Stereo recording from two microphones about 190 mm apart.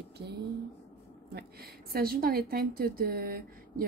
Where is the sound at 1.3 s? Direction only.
55° right (ahead or behind).